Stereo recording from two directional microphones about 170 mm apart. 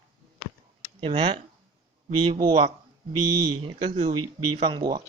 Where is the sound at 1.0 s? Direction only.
40° right (ahead or behind).